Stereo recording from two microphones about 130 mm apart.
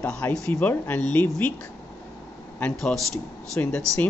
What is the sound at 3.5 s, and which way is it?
Speech, 10° left (ahead or behind).